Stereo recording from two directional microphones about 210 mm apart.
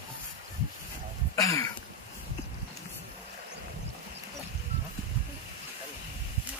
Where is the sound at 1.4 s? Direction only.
15° left (ahead or behind).